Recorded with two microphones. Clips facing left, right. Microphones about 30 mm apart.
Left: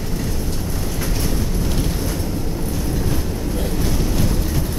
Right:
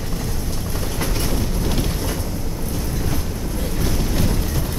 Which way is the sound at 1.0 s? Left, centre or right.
Centre.